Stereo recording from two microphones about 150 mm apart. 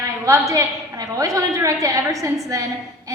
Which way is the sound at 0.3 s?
20° right (ahead or behind).